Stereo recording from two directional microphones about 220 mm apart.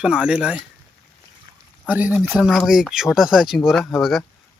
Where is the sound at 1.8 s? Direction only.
5° right (ahead or behind).